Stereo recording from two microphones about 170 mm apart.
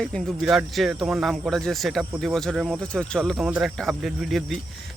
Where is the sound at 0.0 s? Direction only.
Centre (ahead or behind).